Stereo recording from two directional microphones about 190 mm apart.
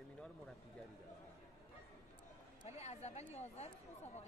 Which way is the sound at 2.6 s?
35° left (ahead or behind).